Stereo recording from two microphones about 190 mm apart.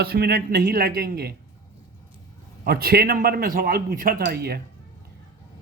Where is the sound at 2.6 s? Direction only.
55° right (ahead or behind).